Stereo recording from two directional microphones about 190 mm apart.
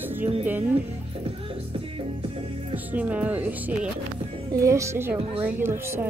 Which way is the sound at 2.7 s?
10° right (ahead or behind).